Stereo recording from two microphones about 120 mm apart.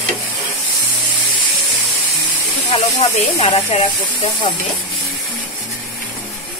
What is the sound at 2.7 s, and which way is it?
Speech, 55° left (ahead or behind).